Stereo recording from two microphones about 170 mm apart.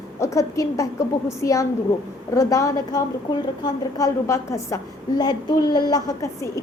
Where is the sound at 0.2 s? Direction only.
20° left (ahead or behind).